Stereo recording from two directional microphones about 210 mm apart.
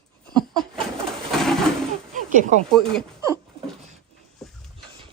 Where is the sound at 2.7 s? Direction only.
Centre (ahead or behind).